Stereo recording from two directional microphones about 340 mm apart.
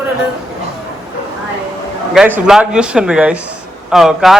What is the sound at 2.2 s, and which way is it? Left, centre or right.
Speech, centre.